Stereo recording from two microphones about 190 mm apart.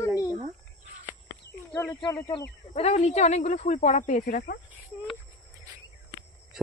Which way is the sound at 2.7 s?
35° left (ahead or behind).